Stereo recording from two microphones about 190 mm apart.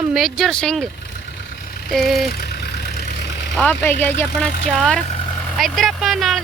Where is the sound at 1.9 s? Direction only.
Centre (ahead or behind).